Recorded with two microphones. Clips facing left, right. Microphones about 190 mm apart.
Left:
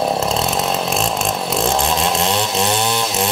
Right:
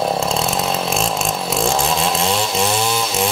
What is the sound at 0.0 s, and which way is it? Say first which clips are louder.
Chainsaw: left 1 dB; centre (ahead or behind).